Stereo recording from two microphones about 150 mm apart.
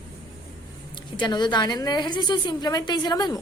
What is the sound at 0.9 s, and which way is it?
A woman's voice, 30° left (ahead or behind).